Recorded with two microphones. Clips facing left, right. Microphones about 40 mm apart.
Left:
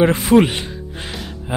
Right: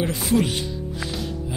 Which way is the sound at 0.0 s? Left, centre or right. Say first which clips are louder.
Left 9 dB; left.